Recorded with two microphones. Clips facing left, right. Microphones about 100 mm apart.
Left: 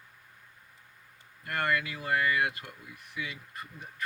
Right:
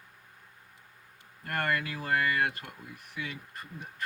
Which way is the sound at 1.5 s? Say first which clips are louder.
Left 1 dB; 40° right (ahead or behind).